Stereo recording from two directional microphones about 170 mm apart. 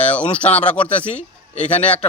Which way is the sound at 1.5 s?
40° left (ahead or behind).